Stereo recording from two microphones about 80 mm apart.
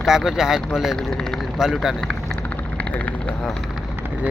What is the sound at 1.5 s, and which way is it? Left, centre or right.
Speech, centre.